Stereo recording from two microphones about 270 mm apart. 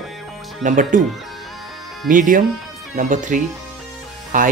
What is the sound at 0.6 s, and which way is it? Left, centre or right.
Speech, right.